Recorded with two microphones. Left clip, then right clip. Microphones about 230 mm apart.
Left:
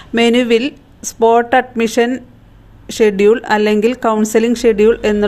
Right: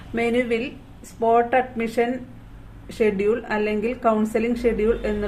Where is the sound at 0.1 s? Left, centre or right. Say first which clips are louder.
Left 10 dB; left.